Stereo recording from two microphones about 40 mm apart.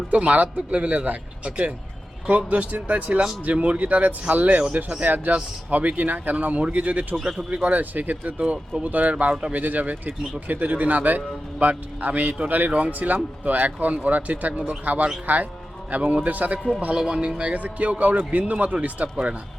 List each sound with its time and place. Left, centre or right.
0.1 s a man's voice: right
7.3 s speech: right
7.6 s a man's voice: right
15.9 s a man's voice: right
17.0 s a man's voice: right